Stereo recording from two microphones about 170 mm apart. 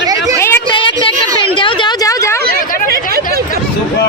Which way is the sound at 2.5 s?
65° right (ahead or behind).